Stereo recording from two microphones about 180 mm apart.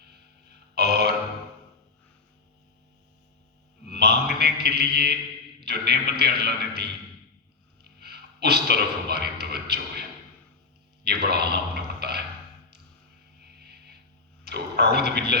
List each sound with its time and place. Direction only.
0.8 s burping: 65° right (ahead or behind)
3.8 s mantra: 65° right (ahead or behind)
5.6 s a man's voice: 65° right (ahead or behind)
7.9 s a man's voice: 60° right (ahead or behind)
11.0 s a sound: 60° right (ahead or behind)
14.4 s speech: 65° right (ahead or behind)